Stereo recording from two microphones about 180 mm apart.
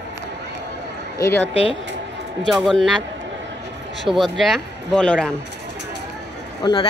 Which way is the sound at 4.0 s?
Centre (ahead or behind).